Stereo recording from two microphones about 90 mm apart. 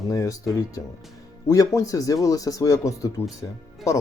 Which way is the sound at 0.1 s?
40° left (ahead or behind).